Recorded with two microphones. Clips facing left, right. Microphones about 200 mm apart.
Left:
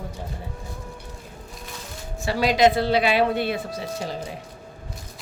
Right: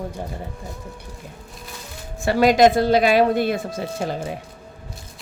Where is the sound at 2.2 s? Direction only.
50° right (ahead or behind).